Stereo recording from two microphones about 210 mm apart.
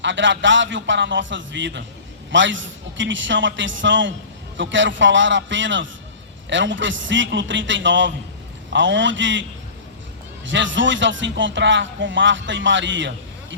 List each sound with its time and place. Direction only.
0.0 s speech: 60° right (ahead or behind)